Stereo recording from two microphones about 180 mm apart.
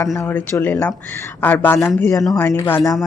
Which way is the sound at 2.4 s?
10° left (ahead or behind).